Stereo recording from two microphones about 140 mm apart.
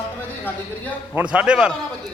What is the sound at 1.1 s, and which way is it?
Speech, 10° right (ahead or behind).